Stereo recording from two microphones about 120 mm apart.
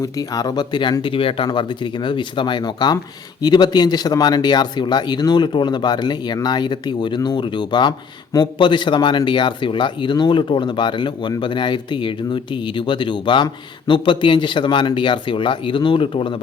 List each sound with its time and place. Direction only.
0.0 s speech: 30° left (ahead or behind)